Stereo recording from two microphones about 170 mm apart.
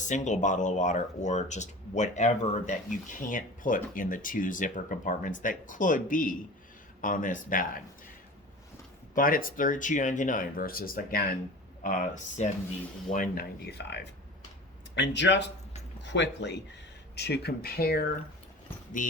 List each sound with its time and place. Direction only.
0.1 s speech: 45° left (ahead or behind)
9.1 s speech: 55° left (ahead or behind)
13.7 s speech: 80° left
17.2 s speech: 75° left (ahead or behind)